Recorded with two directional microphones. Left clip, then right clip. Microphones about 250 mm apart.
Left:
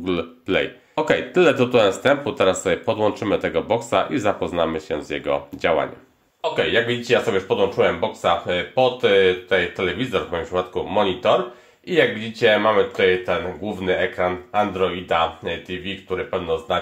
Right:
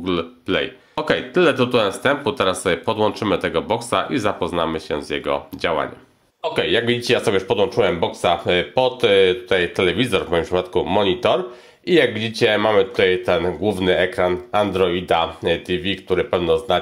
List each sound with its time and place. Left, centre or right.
0.0 s speech: centre
6.5 s speech: right